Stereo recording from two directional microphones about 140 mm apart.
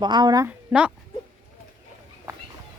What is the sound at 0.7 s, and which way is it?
Speech, 10° right (ahead or behind).